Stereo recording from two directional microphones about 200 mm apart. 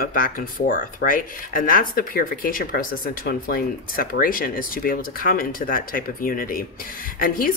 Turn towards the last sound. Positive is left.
turn(degrees=45)  # may be behind; listen again after turning